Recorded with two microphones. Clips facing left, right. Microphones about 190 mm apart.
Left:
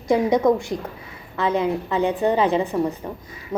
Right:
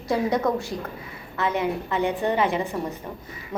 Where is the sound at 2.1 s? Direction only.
15° left (ahead or behind).